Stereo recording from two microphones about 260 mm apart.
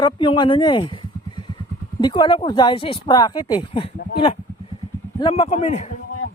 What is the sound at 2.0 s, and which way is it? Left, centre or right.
Speech, centre.